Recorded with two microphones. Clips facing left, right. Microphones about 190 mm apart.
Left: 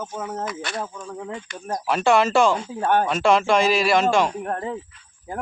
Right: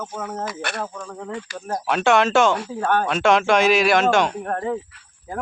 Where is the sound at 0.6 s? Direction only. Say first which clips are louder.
Right 1 dB; 60° right (ahead or behind).